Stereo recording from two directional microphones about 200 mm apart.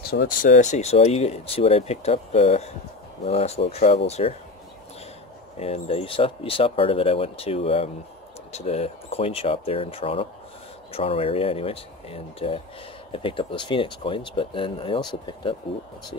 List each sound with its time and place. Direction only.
0.1 s speech: 45° left (ahead or behind)
5.6 s speech: 30° left (ahead or behind)